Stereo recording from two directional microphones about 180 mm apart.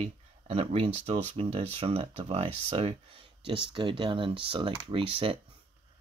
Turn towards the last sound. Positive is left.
turn(degrees=-30)  # may be behind; listen again after turning